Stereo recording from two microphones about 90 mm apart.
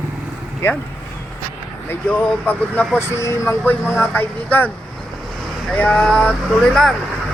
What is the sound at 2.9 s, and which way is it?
Speech, 30° left (ahead or behind).